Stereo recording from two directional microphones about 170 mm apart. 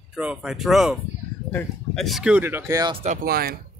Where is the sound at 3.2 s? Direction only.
60° right (ahead or behind).